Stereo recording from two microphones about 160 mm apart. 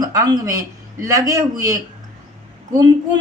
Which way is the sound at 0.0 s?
20° right (ahead or behind).